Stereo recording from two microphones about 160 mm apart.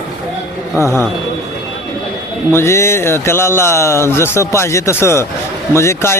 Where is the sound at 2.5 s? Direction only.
15° left (ahead or behind).